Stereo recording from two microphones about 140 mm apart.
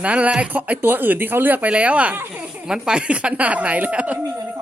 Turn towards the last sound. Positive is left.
turn(degrees=-10)  # may be behind; listen again after turning